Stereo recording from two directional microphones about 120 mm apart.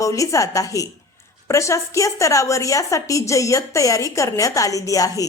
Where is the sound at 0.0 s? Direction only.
25° left (ahead or behind).